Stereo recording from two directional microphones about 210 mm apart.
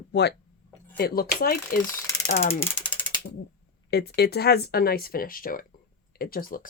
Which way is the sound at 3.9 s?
50° left (ahead or behind).